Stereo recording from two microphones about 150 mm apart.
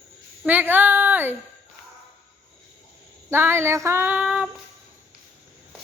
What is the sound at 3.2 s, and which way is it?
Child singing, 15° right (ahead or behind).